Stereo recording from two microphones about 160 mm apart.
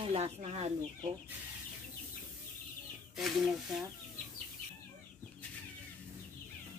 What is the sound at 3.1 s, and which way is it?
Speech, centre (ahead or behind).